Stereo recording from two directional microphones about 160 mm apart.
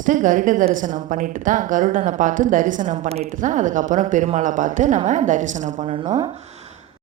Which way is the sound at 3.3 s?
55° right (ahead or behind).